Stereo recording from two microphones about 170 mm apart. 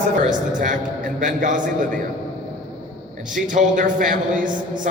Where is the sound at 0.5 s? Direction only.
50° right (ahead or behind).